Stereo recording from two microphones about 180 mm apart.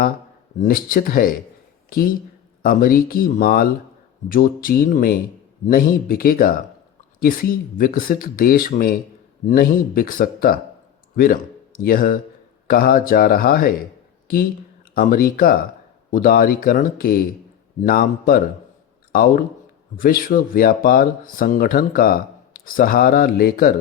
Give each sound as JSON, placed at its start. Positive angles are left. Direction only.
{"t": 0.6, "sound": "speech", "side_deg": 50}
{"t": 11.8, "sound": "speech", "side_deg": 55}